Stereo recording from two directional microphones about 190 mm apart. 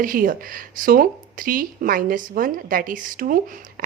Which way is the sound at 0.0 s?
45° right (ahead or behind).